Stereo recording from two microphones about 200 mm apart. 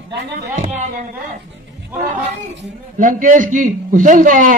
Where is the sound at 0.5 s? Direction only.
35° right (ahead or behind).